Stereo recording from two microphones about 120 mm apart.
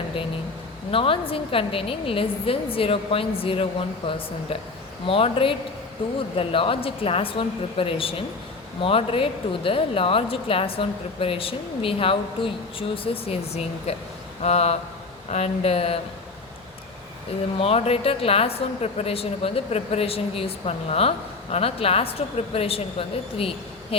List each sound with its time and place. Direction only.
0.9 s a woman's voice: 50° left (ahead or behind)
13.2 s a woman's voice: 60° left (ahead or behind)
17.6 s a woman's voice: 55° left (ahead or behind)